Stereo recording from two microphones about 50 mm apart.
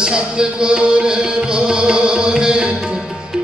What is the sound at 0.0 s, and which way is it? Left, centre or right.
Music, centre.